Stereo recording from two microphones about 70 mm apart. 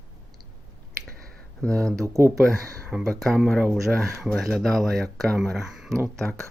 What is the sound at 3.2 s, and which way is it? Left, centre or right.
Speech, centre.